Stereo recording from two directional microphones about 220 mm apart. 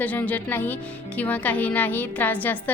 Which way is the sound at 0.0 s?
5° left (ahead or behind).